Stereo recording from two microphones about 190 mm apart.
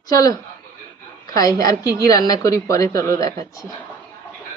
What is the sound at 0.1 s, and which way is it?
Speech, 20° left (ahead or behind).